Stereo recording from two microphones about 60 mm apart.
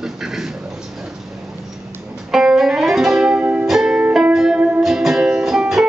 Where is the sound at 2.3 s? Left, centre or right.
Centre.